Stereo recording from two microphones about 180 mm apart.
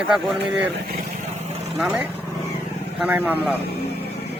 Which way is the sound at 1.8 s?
5° right (ahead or behind).